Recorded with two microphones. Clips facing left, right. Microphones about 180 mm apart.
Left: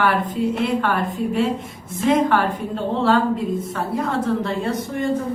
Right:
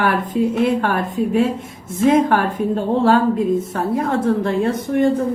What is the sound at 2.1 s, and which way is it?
Speech, 50° right (ahead or behind).